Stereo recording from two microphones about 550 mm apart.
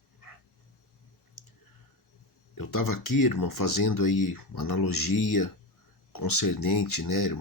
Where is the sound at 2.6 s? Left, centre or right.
Left.